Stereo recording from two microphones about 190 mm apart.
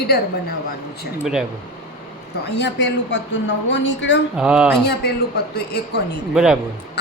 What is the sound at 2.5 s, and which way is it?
A woman's voice, 65° left (ahead or behind).